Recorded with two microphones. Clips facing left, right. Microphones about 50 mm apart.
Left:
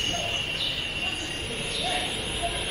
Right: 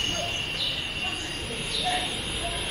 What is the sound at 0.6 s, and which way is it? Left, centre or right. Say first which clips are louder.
Bird: left 1 dB; centre.